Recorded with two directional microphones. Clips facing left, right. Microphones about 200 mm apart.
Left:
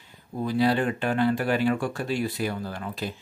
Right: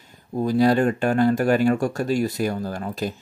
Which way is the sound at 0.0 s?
45° right (ahead or behind).